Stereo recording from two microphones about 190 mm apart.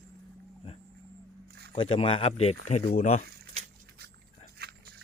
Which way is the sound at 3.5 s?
50° right (ahead or behind).